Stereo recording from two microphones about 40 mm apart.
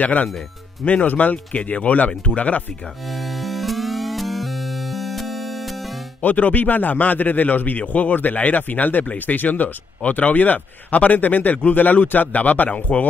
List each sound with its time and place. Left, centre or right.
0.0 s speech: left
3.3 s music: centre
6.2 s speech: left